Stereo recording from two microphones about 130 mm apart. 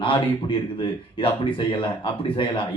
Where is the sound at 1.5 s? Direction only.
40° left (ahead or behind).